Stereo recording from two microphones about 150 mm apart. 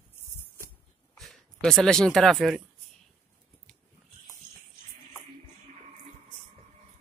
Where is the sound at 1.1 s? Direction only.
Centre (ahead or behind).